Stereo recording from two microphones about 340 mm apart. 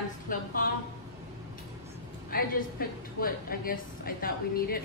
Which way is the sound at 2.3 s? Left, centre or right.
Left.